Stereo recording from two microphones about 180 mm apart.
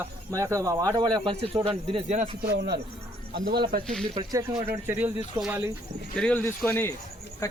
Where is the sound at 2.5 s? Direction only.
65° right (ahead or behind).